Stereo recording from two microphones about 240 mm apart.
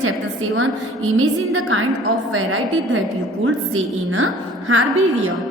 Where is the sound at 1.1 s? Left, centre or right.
Right.